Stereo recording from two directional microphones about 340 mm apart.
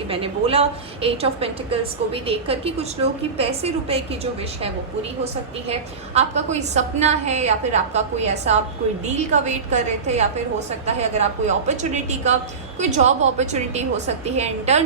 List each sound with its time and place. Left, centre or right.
0.1 s a woman's voice: centre
6.1 s a woman's voice: centre